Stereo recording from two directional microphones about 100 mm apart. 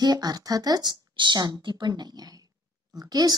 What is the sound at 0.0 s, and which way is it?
Speech, 40° right (ahead or behind).